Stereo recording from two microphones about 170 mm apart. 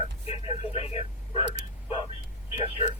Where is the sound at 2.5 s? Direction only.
35° left (ahead or behind).